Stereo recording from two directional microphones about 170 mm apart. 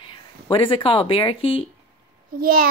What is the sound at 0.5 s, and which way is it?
Speech, 30° left (ahead or behind).